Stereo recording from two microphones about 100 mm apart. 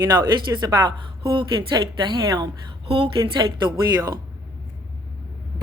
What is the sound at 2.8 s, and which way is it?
Speech, 75° right (ahead or behind).